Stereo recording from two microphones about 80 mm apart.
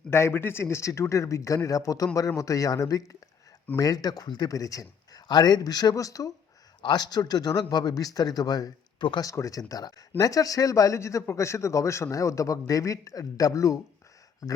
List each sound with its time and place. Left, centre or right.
0.1 s a man's voice: left
5.3 s speech: left
6.8 s speech: left
9.2 s speech: left